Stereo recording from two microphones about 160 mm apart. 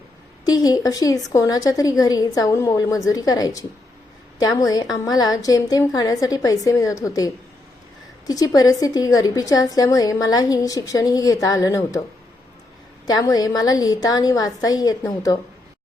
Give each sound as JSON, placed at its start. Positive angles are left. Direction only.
{"t": 0.4, "sound": "a woman's voice", "side_deg": 25}
{"t": 8.3, "sound": "a woman's voice", "side_deg": 25}
{"t": 13.1, "sound": "a woman's voice", "side_deg": 25}